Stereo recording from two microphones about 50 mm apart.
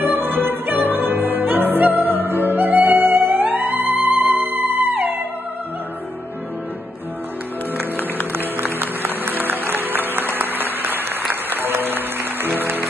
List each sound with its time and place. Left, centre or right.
0.0 s music: right
8.6 s music: right